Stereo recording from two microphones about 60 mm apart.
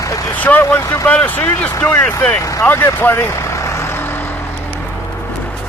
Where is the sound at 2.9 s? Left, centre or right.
Left.